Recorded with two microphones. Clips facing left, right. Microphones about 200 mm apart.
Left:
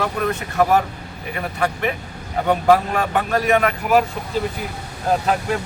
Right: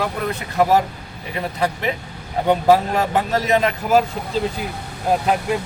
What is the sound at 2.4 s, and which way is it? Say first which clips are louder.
A man's voice: right 1 dB; 20° right (ahead or behind).